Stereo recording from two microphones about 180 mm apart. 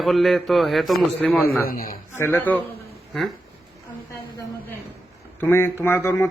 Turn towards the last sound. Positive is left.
turn(degrees=15)  # may be behind; listen again after turning